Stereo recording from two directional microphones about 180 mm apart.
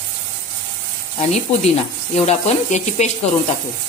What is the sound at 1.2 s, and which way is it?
Sizzle, 35° left (ahead or behind).